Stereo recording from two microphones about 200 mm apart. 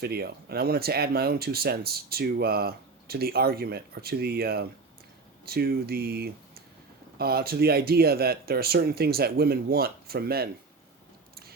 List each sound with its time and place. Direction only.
0.0 s speech: 50° right (ahead or behind)